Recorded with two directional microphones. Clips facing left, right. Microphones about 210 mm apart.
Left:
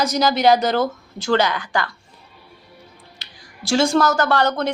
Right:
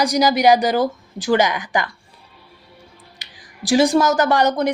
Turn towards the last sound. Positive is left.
turn(degrees=-15)  # may be behind; listen again after turning